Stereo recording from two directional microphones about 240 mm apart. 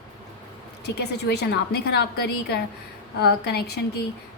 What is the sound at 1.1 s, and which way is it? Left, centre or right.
A woman's voice, left.